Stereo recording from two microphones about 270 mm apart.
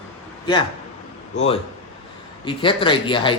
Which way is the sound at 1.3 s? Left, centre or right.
Left.